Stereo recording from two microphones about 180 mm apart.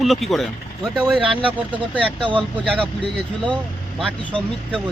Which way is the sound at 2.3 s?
5° left (ahead or behind).